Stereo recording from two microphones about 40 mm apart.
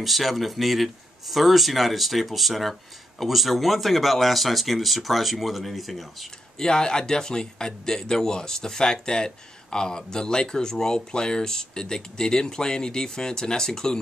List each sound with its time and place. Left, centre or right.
0.0 s speech: centre
6.6 s speech: centre